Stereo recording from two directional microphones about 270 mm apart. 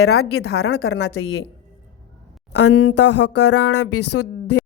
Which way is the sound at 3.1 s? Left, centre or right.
Left.